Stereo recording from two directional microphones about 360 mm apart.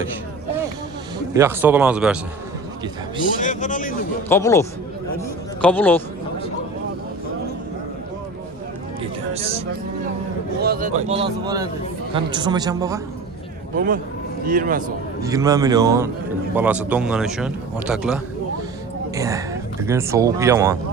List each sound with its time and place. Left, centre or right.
1.3 s a man's voice: centre
3.4 s speech: left
4.3 s speech: centre
5.6 s a man's voice: centre
10.6 s speech: right
13.7 s speech: right
15.2 s a man's voice: centre